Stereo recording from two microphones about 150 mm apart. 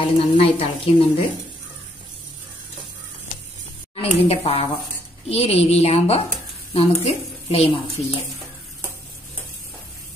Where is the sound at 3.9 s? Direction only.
40° left (ahead or behind).